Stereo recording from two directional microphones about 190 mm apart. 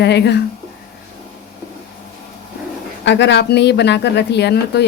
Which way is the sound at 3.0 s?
70° left (ahead or behind).